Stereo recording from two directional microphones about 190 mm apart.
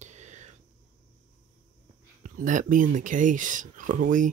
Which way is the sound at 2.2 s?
40° right (ahead or behind).